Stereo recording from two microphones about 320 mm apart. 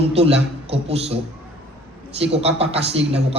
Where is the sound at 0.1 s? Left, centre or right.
Centre.